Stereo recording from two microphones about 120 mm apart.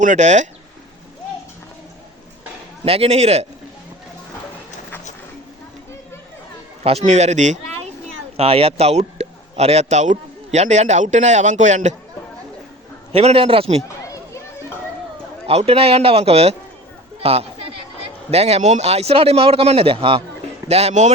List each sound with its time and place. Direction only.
0.0 s speech: 85° right
2.8 s speech: 55° right (ahead or behind)
6.8 s speech: 60° right (ahead or behind); by 7.9 s 85° right
8.4 s a man's voice: 55° right (ahead or behind); by 11.9 s 80° right
13.1 s a man's voice: 50° right (ahead or behind)
15.4 s speech: 55° right (ahead or behind)
17.2 s a sound: 55° right (ahead or behind)
18.3 s speech: 60° right (ahead or behind)
20.7 s speech: 60° right (ahead or behind)